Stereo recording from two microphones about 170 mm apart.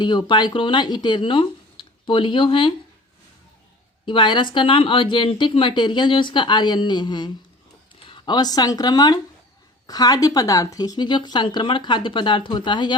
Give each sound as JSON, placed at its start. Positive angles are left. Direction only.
{"t": 0.0, "sound": "speech", "side_deg": 25}
{"t": 4.0, "sound": "speech", "side_deg": 30}